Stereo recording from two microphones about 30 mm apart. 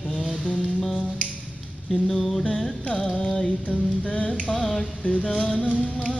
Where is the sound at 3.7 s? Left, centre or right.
Left.